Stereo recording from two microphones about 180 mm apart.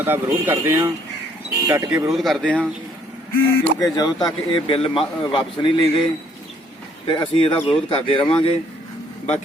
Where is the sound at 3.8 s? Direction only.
20° left (ahead or behind).